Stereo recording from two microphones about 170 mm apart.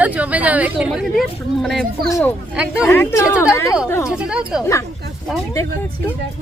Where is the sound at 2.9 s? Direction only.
15° left (ahead or behind).